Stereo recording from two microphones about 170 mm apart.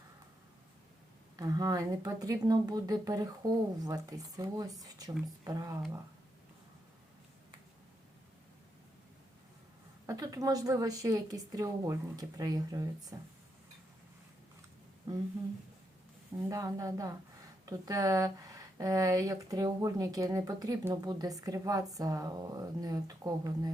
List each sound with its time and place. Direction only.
1.4 s speech: 20° right (ahead or behind)
10.1 s speech: 20° right (ahead or behind)
16.5 s speech: 20° right (ahead or behind)